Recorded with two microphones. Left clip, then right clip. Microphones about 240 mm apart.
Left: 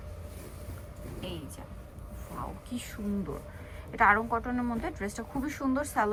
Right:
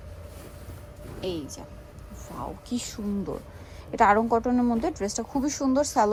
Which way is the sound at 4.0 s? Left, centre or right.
Centre.